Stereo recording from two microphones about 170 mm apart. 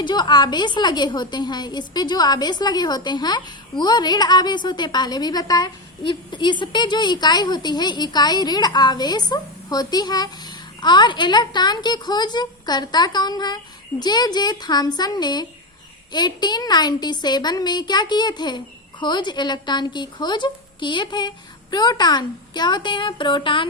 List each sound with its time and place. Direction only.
0.0 s a woman's voice: 25° left (ahead or behind)